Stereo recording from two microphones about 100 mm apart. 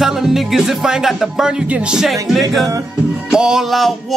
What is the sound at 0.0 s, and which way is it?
Music, 5° right (ahead or behind).